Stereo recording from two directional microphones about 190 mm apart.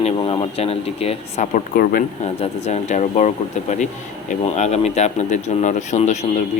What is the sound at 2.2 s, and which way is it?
Speech, 35° left (ahead or behind).